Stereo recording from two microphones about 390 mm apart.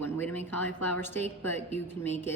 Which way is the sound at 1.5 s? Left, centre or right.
Centre.